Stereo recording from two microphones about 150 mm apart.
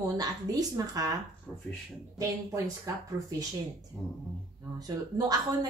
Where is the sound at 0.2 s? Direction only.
25° right (ahead or behind).